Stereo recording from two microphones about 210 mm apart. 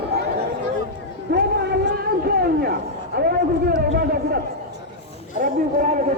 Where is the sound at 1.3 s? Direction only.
50° right (ahead or behind).